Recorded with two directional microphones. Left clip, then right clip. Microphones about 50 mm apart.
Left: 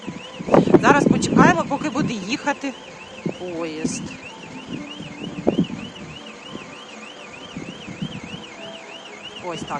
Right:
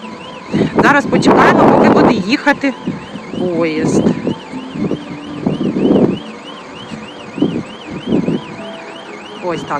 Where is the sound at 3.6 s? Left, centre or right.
Centre.